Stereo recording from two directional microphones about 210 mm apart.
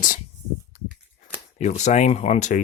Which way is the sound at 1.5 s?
35° left (ahead or behind).